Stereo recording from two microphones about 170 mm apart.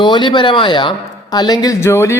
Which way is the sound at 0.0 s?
25° left (ahead or behind).